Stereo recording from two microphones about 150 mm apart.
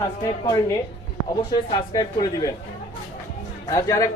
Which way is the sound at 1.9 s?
25° left (ahead or behind).